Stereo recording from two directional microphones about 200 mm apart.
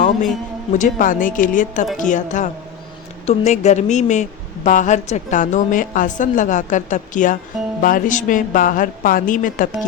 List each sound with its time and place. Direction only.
0.7 s a woman's voice: 40° left (ahead or behind)